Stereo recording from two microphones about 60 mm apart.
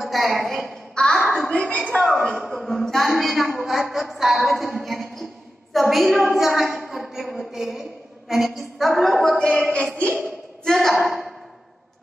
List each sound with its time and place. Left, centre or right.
0.0 s a woman's voice: centre
0.9 s a woman's voice: centre
2.3 s a woman's voice: centre